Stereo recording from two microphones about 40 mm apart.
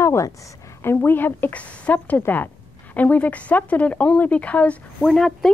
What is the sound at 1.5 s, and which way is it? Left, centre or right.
Speech, left.